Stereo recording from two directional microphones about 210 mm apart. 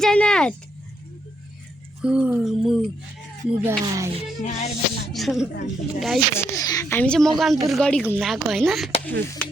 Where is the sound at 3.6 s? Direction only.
15° right (ahead or behind).